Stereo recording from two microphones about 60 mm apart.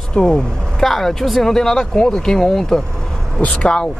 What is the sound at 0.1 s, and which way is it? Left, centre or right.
Speech, centre.